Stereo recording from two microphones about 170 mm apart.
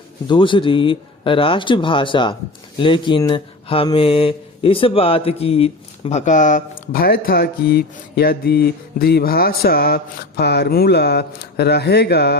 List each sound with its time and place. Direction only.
0.3 s speech: 30° left (ahead or behind); by 12.4 s 75° left (ahead or behind)